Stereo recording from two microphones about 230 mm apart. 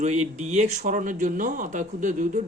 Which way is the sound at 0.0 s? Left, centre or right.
Right.